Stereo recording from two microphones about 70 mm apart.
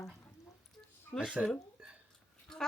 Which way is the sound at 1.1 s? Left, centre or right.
Left.